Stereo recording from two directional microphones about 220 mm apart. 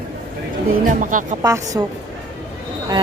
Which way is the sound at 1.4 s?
15° right (ahead or behind).